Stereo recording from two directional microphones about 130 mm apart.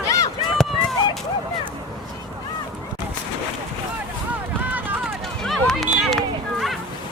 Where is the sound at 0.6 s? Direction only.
Centre (ahead or behind).